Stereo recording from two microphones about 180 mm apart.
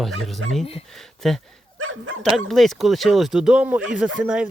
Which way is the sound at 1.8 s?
90° right.